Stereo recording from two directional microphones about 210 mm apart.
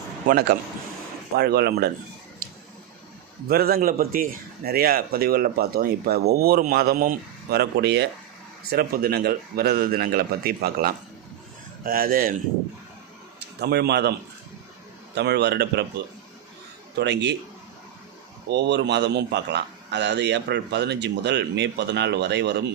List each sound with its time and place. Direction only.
0.3 s a man's voice: 50° right (ahead or behind)
3.5 s a man's voice: 45° right (ahead or behind)
13.6 s a man's voice: 50° right (ahead or behind)
15.1 s a man's voice: 55° right (ahead or behind)
16.9 s a man's voice: 55° right (ahead or behind)
18.4 s a man's voice: 55° right (ahead or behind)